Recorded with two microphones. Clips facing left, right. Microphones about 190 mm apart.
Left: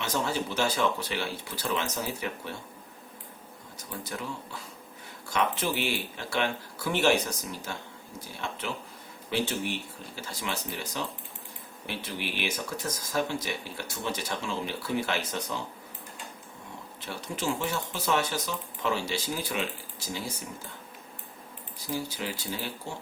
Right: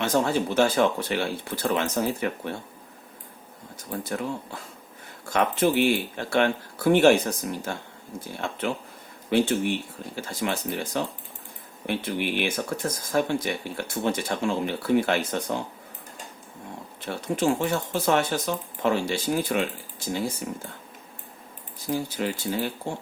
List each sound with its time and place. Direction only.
0.0 s speech: 55° right (ahead or behind)
3.8 s speech: 50° right (ahead or behind)
9.3 s speech: 55° right (ahead or behind)
17.1 s speech: 55° right (ahead or behind)
21.8 s speech: 50° right (ahead or behind)